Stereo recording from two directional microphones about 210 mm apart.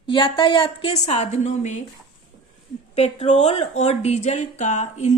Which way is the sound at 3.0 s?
30° left (ahead or behind).